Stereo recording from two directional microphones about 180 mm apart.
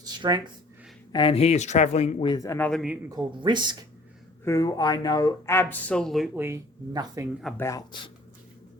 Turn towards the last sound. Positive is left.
turn(degrees=15)  # may be behind; listen again after turning